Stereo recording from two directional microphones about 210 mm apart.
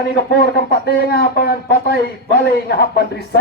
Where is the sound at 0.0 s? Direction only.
50° left (ahead or behind).